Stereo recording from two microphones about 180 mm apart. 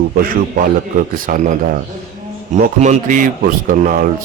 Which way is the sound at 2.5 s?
45° right (ahead or behind).